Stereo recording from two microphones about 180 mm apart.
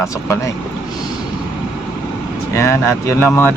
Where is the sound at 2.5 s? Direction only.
15° left (ahead or behind).